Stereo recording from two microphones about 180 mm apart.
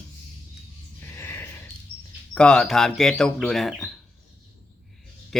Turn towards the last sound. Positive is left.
turn(degrees=0)  # may be behind; listen again after turning